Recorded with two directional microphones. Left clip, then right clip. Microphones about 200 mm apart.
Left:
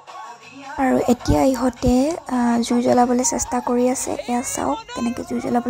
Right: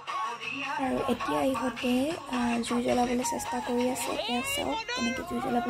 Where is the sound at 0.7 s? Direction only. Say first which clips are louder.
Left 13 dB; 30° left (ahead or behind).